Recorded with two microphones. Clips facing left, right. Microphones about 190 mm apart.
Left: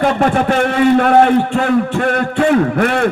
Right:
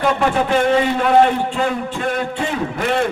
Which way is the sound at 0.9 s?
55° left (ahead or behind).